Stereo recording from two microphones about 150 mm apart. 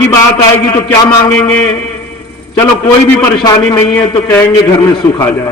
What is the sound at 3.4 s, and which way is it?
Speech, 20° left (ahead or behind).